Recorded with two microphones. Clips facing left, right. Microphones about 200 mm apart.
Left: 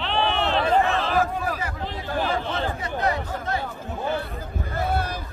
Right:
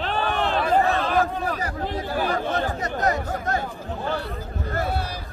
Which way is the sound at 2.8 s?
45° right (ahead or behind).